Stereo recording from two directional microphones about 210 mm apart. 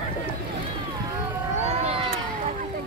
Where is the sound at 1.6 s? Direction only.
30° right (ahead or behind).